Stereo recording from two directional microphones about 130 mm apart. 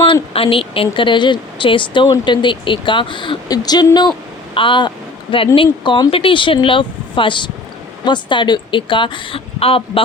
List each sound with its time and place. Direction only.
0.0 s speech: 45° left (ahead or behind)